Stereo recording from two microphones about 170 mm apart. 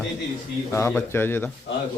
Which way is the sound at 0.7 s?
15° left (ahead or behind).